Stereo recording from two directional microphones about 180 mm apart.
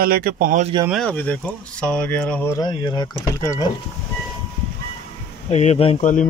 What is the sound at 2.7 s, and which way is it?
Speech, 25° left (ahead or behind).